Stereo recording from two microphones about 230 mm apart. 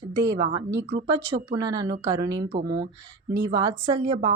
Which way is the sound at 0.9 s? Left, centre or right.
Centre.